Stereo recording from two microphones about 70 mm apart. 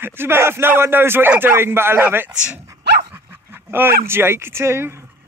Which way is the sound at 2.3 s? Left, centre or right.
Centre.